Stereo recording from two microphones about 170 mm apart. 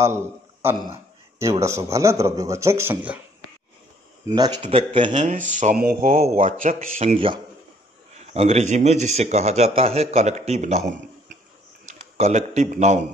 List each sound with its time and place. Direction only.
0.0 s a man's voice: 15° right (ahead or behind)
4.4 s a man's voice: 30° right (ahead or behind)
5.3 s speech: 45° right (ahead or behind)
5.8 s speech: 65° right (ahead or behind)
6.1 s a man's voice: 40° right (ahead or behind)